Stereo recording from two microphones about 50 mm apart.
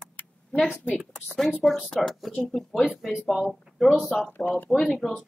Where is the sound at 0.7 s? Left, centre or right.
Left.